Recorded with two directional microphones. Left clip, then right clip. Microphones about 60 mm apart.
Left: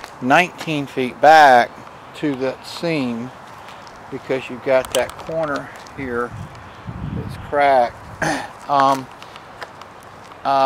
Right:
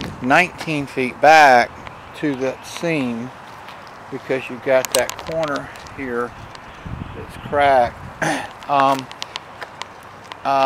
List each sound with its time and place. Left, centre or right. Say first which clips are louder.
0.7 s speech: even; centre
4.3 s speech: even; centre
4.9 s speech: right 1 dB; right
5.6 s speech: even; centre
7.5 s speech: even; centre
10.4 s speech: left 1 dB; centre